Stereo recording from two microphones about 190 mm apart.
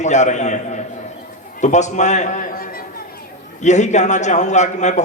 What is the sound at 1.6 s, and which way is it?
A man's voice, 40° left (ahead or behind).